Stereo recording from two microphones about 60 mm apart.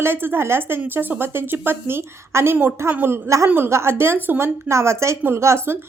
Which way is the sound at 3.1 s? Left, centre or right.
Right.